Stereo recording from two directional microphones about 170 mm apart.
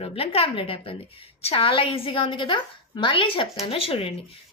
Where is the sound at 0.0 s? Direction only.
35° left (ahead or behind).